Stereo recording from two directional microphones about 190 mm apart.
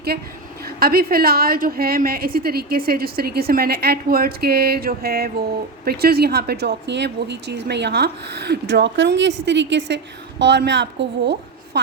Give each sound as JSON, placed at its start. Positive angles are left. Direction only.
{"t": 0.8, "sound": "a woman's voice", "side_deg": -50}